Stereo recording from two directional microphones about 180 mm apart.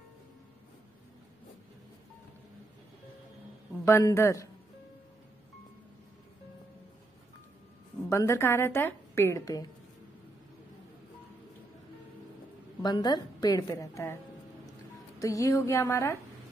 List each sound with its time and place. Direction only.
3.8 s a woman's voice: 15° left (ahead or behind)
8.1 s a woman's voice: 15° left (ahead or behind)
12.8 s a woman's voice: 20° left (ahead or behind)
15.1 s a woman's voice: 20° left (ahead or behind)